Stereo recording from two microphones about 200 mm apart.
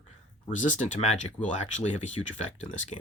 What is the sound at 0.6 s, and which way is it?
Speech, 35° left (ahead or behind).